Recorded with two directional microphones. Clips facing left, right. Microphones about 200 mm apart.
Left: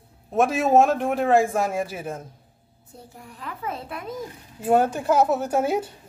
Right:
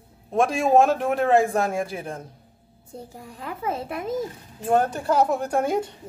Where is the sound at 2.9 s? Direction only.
25° right (ahead or behind).